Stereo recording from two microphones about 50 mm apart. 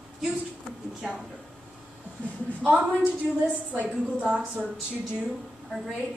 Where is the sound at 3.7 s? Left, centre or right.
Right.